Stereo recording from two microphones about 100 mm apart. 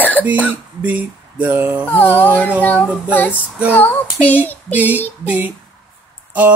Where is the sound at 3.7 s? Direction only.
20° left (ahead or behind).